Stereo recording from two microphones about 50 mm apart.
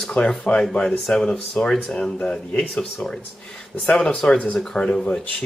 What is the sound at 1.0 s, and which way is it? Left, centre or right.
Speech, centre.